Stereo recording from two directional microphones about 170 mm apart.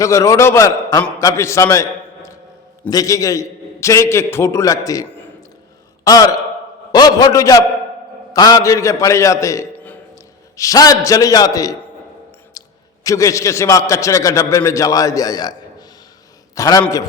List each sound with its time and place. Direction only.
0.0 s a man's voice: 20° left (ahead or behind)
6.1 s a man's voice: 20° left (ahead or behind)
12.6 s a sound: 20° left (ahead or behind)
13.1 s a man's voice: 20° left (ahead or behind)
16.6 s a man's voice: 20° left (ahead or behind)